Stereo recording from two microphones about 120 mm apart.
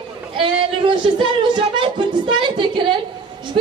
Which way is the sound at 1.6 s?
40° right (ahead or behind).